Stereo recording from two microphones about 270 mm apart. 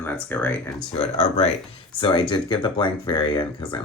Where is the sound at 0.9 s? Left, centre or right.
Left.